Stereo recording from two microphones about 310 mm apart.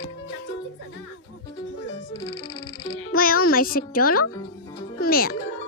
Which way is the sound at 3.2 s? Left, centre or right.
Left.